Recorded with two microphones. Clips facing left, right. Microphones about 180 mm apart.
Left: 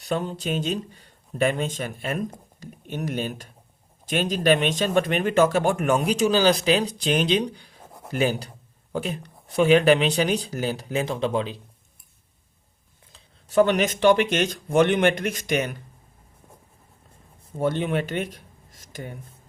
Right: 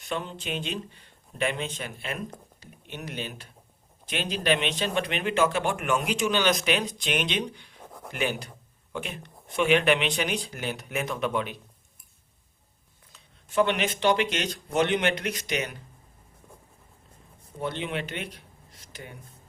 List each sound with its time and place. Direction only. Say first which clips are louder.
0.0 s a man's voice: left 6 dB; 40° left (ahead or behind)
13.1 s speech: left 5 dB; 40° left (ahead or behind)
17.6 s speech: left 7 dB; 45° left (ahead or behind)